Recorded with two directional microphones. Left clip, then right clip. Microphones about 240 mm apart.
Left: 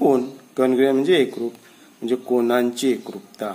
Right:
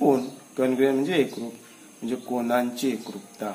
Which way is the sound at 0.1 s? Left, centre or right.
Left.